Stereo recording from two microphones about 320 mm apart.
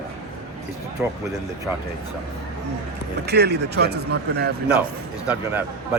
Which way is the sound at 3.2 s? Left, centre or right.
Right.